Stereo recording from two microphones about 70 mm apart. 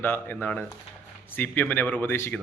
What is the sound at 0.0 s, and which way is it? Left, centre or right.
Speech, left.